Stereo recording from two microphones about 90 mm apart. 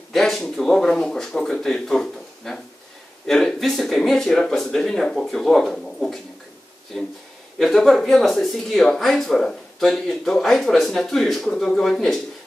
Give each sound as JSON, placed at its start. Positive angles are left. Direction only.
{"t": 0.1, "sound": "speech", "side_deg": 5}
{"t": 7.5, "sound": "speech", "side_deg": 0}